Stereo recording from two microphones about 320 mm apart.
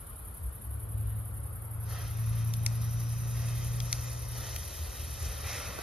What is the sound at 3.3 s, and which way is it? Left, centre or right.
Vehicle, centre.